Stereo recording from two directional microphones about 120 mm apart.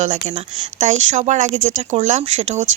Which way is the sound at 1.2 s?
75° right (ahead or behind).